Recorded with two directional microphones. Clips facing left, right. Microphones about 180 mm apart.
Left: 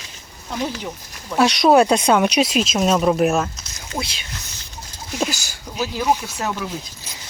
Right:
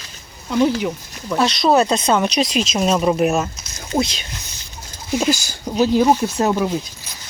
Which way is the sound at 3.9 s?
40° right (ahead or behind).